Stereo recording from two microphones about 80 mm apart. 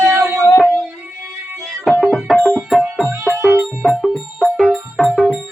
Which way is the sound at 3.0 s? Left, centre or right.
Right.